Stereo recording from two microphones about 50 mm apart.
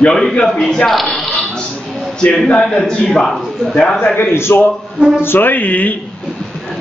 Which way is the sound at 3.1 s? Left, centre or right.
Centre.